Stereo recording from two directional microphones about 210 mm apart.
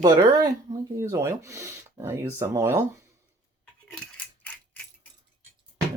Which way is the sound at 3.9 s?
5° left (ahead or behind).